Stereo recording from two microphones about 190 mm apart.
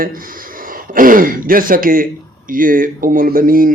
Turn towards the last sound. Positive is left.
turn(degrees=-45)  # may be behind; listen again after turning